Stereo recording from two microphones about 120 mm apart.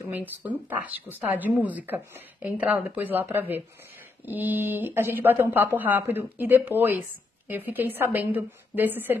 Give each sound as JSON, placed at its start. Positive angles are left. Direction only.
{"t": 0.1, "sound": "speech", "side_deg": -15}